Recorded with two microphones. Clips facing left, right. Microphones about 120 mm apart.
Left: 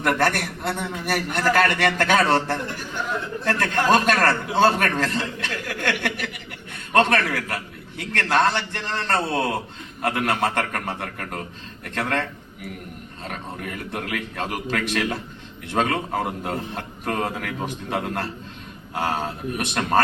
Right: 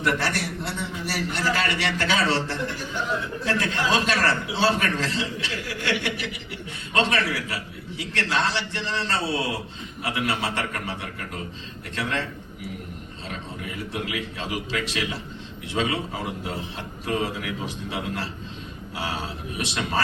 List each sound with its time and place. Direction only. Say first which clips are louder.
0.0 s a man's voice: left 4 dB; 50° left (ahead or behind)
13.2 s a man's voice: left 3 dB; 55° left (ahead or behind)